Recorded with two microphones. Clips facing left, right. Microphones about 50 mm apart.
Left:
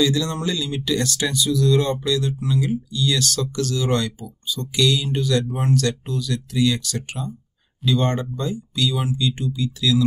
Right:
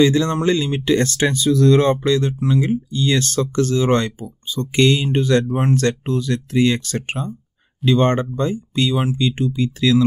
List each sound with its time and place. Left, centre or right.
0.0 s speech: right